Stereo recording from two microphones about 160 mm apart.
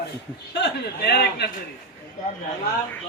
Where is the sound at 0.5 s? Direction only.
90° left.